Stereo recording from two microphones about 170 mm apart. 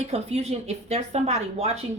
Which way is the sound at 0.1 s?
35° right (ahead or behind).